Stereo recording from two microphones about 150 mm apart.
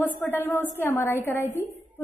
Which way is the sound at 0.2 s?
10° left (ahead or behind).